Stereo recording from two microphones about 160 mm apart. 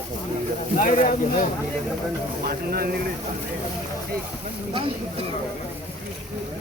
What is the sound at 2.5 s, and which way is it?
Speech, 70° right (ahead or behind).